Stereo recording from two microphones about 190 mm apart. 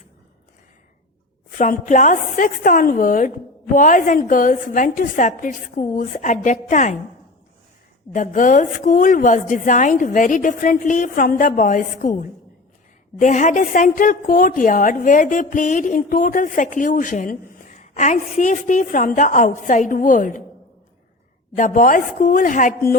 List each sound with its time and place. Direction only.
1.5 s a woman's voice: 45° left (ahead or behind)
8.1 s a woman's voice: 40° left (ahead or behind)
21.5 s a woman's voice: 45° left (ahead or behind)